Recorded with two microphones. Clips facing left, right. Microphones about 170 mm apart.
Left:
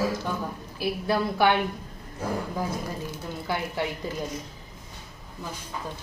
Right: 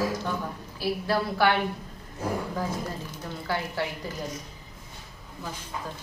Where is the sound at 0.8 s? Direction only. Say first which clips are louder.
Left 1 dB; 15° left (ahead or behind).